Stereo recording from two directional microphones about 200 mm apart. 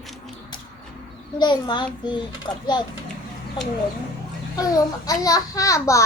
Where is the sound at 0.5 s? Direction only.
20° left (ahead or behind).